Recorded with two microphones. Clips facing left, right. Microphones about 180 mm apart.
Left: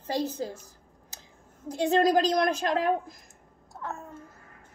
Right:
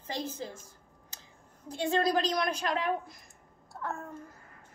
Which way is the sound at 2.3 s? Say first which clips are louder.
Left 5 dB; 50° left (ahead or behind).